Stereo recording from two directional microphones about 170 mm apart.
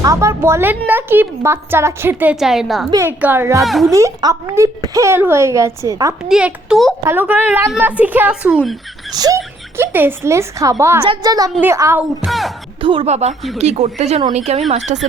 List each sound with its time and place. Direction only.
0.0 s speech: 20° right (ahead or behind); by 2.9 s centre (ahead or behind)
2.9 s speech: 15° right (ahead or behind)
3.6 s a child's voice: centre (ahead or behind)
3.9 s speech: 20° right (ahead or behind)
6.2 s a child's voice: 5° right (ahead or behind)
7.0 s speech: 15° right (ahead or behind)
9.1 s a woman's voice: 20° right (ahead or behind); by 12.5 s 5° right (ahead or behind)
12.8 s speech: 30° right (ahead or behind)